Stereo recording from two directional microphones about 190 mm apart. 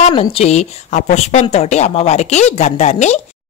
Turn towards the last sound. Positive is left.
turn(degrees=35)  # may be behind; listen again after turning